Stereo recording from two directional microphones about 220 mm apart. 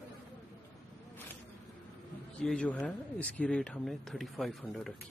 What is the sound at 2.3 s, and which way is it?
Speech, 5° left (ahead or behind).